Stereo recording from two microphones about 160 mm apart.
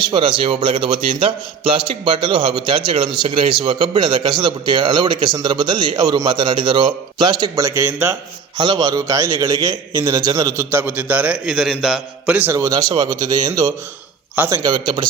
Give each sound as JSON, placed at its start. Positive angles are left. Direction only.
{"t": 0.0, "sound": "a man's voice", "side_deg": -30}
{"t": 8.5, "sound": "a man's voice", "side_deg": -25}
{"t": 14.3, "sound": "a man's voice", "side_deg": -10}
{"t": 14.6, "sound": "a man's voice", "side_deg": -25}